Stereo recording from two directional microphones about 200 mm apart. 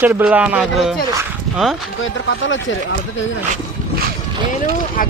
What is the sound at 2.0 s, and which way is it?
Speech, 70° left (ahead or behind).